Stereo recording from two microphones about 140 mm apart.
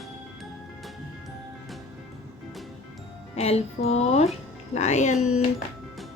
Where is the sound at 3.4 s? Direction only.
50° left (ahead or behind).